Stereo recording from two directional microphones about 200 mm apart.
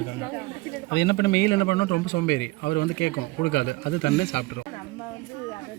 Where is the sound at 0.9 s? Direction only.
55° left (ahead or behind).